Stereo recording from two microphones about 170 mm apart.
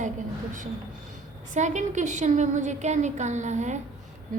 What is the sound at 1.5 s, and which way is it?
A woman's voice, 45° right (ahead or behind).